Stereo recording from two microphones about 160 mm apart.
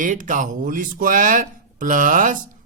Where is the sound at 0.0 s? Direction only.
55° right (ahead or behind).